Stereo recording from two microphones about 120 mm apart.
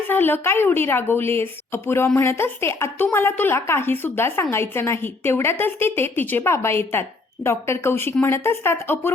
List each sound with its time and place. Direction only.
0.1 s a woman's voice: 15° left (ahead or behind)